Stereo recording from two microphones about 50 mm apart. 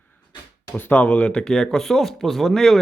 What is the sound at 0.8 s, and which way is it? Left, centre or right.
Speech, left.